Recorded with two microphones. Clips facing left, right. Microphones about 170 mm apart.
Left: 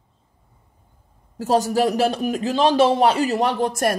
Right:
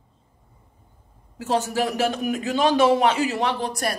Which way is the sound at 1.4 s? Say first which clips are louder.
Left 5 dB; 40° left (ahead or behind).